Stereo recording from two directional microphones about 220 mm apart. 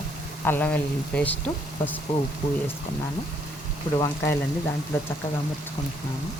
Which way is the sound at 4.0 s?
10° left (ahead or behind).